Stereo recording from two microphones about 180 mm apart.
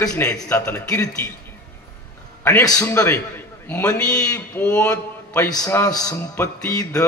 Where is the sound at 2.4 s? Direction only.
20° left (ahead or behind).